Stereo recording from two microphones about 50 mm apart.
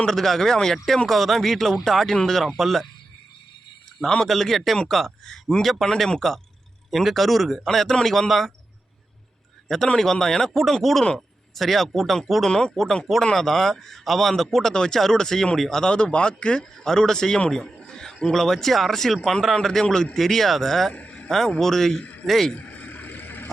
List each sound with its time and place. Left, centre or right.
0.0 s a man's voice: centre
4.3 s a man's voice: centre
9.6 s a man's voice: centre
12.5 s a man's voice: centre
15.8 s a man's voice: centre
21.1 s a sound: centre
21.6 s a man's voice: centre
22.5 s vehicle: left